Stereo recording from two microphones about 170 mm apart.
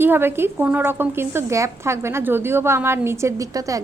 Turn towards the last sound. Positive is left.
turn(degrees=-20)  # may be behind; listen again after turning